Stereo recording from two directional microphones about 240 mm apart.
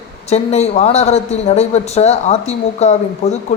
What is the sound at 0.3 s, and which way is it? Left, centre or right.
Speech, left.